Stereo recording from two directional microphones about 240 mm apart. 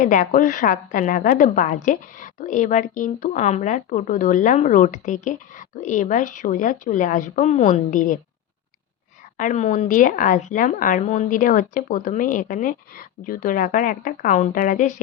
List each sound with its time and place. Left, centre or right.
0.0 s a woman's voice: left
9.4 s a woman's voice: left